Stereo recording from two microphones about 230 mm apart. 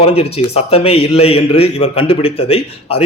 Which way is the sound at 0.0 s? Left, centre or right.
Left.